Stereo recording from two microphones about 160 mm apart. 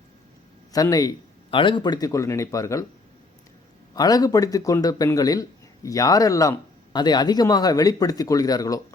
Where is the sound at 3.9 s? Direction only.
25° left (ahead or behind).